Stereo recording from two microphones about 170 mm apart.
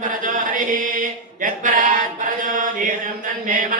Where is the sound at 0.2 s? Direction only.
50° right (ahead or behind).